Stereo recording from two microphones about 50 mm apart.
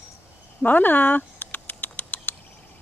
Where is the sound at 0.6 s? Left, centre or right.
Left.